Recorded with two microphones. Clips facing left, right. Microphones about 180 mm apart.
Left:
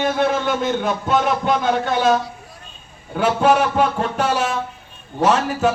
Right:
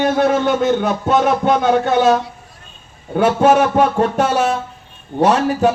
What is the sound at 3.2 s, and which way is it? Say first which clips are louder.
A man's voice: right 4 dB; 45° right (ahead or behind).